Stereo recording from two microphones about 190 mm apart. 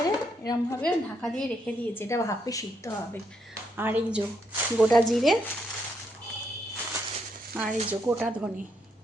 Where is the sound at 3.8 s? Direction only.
10° right (ahead or behind).